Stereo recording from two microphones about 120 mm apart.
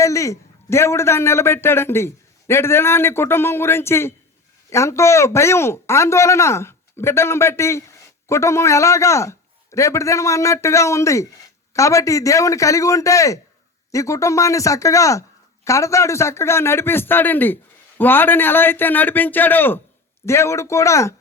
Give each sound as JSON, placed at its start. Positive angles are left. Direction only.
{"t": 0.0, "sound": "a man's voice", "side_deg": 25}